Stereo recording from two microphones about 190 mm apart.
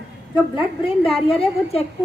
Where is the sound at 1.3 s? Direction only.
30° left (ahead or behind).